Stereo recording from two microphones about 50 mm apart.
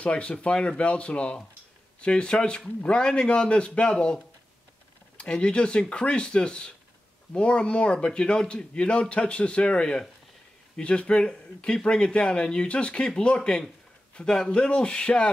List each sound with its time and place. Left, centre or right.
0.0 s speech: left